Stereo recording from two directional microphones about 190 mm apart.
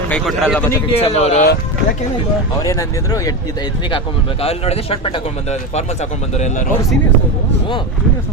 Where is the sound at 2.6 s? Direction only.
15° left (ahead or behind); by 6.6 s 40° left (ahead or behind).